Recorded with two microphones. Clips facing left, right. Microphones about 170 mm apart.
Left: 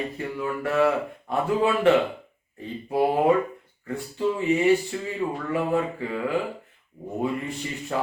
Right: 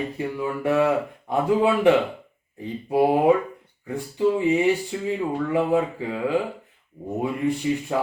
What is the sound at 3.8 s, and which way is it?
Speech, 15° right (ahead or behind).